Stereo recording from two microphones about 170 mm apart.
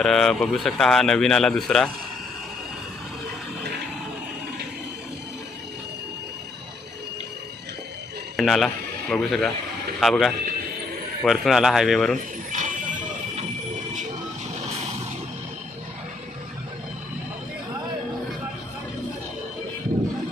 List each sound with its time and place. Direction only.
0.0 s speech: 5° left (ahead or behind)
8.4 s speech: centre (ahead or behind)
12.5 s a sound: 50° right (ahead or behind)